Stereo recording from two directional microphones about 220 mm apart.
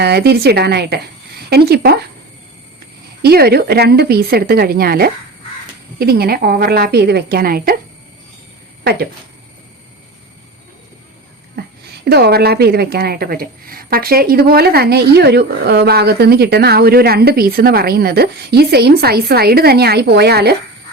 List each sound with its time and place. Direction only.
0.0 s speech: 45° right (ahead or behind)
3.2 s speech: 45° right (ahead or behind)
8.8 s speech: 45° right (ahead or behind)
11.6 s a sound: 45° right (ahead or behind)
12.0 s speech: 45° right (ahead or behind)